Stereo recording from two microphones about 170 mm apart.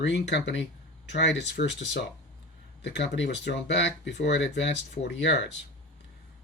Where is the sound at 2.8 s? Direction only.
90° left.